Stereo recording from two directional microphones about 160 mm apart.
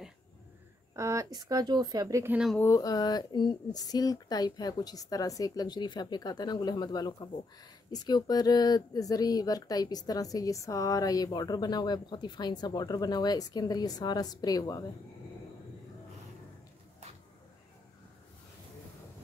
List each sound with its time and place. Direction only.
0.9 s speech: 20° right (ahead or behind)
2.5 s speech: 20° left (ahead or behind)